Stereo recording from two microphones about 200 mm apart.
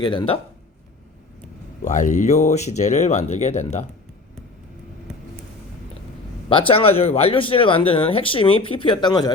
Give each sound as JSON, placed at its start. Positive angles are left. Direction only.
{"t": 0.0, "sound": "speech", "side_deg": 20}
{"t": 1.8, "sound": "speech", "side_deg": 40}
{"t": 6.5, "sound": "speech", "side_deg": 25}